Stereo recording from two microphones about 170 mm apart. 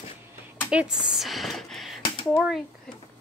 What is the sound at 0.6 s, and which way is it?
Speech, 5° right (ahead or behind).